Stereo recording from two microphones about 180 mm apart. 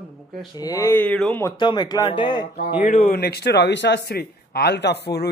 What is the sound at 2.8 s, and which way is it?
A man's voice, 45° left (ahead or behind).